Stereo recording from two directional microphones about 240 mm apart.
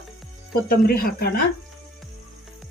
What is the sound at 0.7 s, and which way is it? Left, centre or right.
Speech, left.